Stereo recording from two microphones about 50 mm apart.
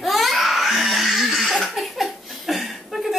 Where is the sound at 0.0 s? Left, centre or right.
Centre.